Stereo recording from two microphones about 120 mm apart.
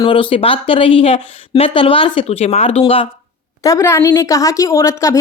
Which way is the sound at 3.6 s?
25° left (ahead or behind).